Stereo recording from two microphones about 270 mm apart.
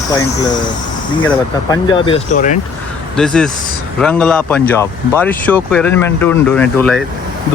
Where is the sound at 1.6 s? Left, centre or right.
Centre.